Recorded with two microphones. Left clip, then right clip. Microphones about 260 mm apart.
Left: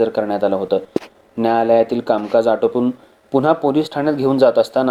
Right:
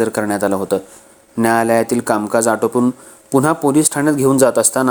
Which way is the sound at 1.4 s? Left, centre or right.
Right.